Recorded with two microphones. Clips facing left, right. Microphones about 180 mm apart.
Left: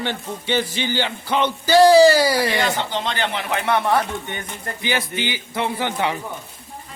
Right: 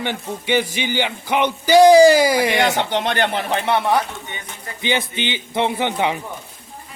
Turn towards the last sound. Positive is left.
turn(degrees=-20)  # may be behind; listen again after turning